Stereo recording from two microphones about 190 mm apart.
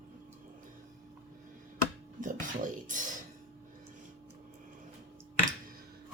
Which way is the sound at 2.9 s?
40° right (ahead or behind).